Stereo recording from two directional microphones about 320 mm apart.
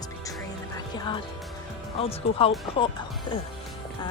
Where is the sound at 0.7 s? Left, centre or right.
Centre.